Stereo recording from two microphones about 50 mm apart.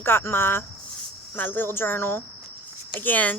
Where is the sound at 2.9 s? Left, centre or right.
Left.